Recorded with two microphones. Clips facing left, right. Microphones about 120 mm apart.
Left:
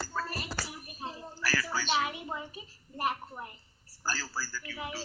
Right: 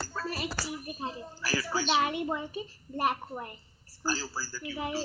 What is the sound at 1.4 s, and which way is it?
Speech, 20° right (ahead or behind).